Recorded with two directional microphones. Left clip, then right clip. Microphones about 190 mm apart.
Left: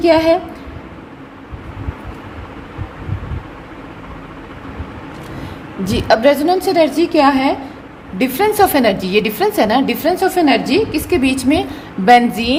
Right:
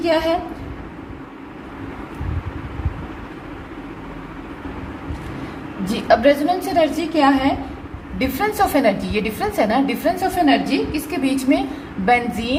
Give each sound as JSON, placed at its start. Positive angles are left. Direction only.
{"t": 0.0, "sound": "a woman's voice", "side_deg": 55}
{"t": 5.8, "sound": "a woman's voice", "side_deg": 50}